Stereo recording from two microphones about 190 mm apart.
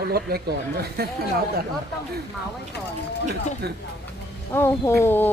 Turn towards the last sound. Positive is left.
turn(degrees=10)  # may be behind; listen again after turning